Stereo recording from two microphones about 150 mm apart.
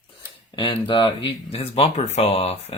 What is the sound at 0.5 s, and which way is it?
Speech, 35° left (ahead or behind).